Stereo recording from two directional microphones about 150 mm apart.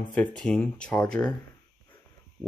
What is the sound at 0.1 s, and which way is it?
Speech, 5° left (ahead or behind).